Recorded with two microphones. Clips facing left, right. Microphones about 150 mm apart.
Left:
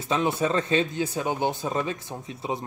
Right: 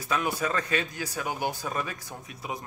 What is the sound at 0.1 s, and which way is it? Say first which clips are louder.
Speech: left 5 dB; 25° left (ahead or behind).